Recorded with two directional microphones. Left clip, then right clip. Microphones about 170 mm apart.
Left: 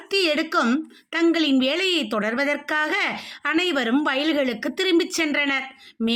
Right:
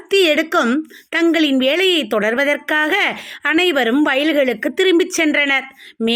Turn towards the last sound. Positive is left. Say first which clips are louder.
# right 6 dB
turn(degrees=-20)  # may be behind; listen again after turning